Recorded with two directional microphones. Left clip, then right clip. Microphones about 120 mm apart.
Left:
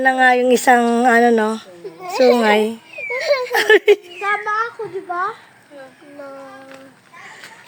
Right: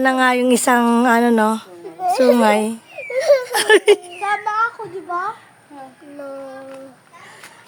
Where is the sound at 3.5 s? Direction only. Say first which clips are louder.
Left 1 dB; 15° right (ahead or behind).